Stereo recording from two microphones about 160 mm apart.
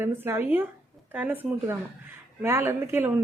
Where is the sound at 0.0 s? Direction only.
15° right (ahead or behind).